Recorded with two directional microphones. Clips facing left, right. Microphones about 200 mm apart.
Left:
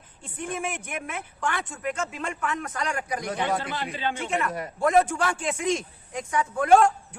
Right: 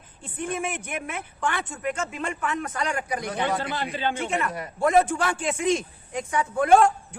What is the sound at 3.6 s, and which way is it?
Speech, 35° right (ahead or behind).